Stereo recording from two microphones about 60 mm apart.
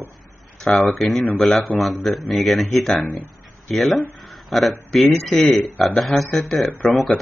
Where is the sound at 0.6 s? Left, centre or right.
Centre.